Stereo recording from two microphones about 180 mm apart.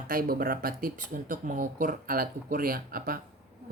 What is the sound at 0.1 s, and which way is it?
Speech, 55° right (ahead or behind).